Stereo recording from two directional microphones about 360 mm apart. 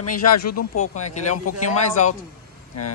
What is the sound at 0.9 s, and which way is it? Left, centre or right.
Speech, centre.